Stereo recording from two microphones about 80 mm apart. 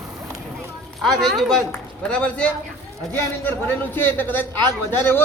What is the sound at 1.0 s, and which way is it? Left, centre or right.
Speech, centre.